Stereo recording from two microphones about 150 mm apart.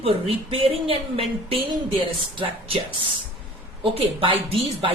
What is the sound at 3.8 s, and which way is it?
A woman's voice, 40° right (ahead or behind).